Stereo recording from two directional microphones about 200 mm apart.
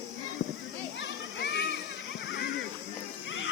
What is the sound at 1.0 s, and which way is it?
Children playing, 60° left (ahead or behind).